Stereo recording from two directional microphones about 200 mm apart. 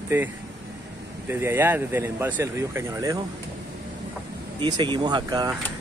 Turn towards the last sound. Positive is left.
turn(degrees=-20)  # may be behind; listen again after turning